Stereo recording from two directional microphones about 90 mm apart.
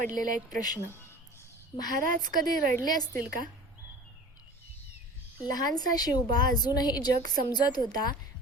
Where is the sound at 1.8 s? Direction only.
50° left (ahead or behind).